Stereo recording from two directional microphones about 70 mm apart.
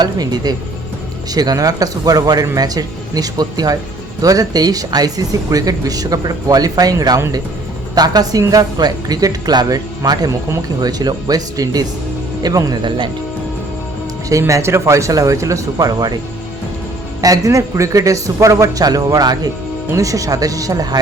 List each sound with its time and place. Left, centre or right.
0.0 s speech: right
10.8 s speech: right
14.3 s speech: right
17.2 s speech: right
19.9 s speech: right